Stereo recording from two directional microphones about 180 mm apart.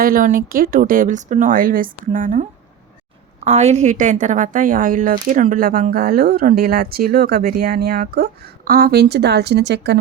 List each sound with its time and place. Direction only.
0.0 s a woman's voice: 50° right (ahead or behind); by 10.0 s 70° right (ahead or behind)